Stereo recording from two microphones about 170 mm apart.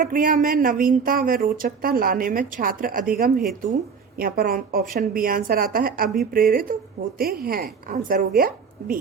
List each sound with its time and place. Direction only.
0.0 s speech: 55° right (ahead or behind)